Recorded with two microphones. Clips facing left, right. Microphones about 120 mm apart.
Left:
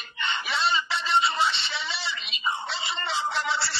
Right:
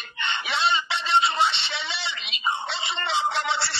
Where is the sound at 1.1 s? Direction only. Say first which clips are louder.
Right 2 dB; 70° right (ahead or behind).